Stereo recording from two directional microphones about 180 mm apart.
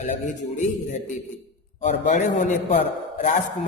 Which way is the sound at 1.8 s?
40° left (ahead or behind).